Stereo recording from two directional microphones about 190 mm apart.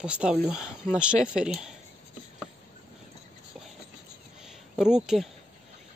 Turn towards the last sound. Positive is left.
turn(degrees=-5)  # may be behind; listen again after turning